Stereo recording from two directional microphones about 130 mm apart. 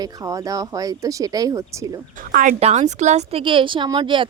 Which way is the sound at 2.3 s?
90° right.